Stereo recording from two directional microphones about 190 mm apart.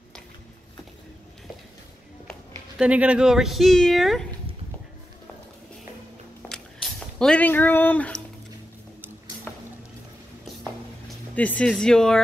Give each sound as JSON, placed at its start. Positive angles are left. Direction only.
{"t": 2.8, "sound": "speech", "side_deg": -5}
{"t": 6.5, "sound": "a sound", "side_deg": 5}
{"t": 11.3, "sound": "speech", "side_deg": 10}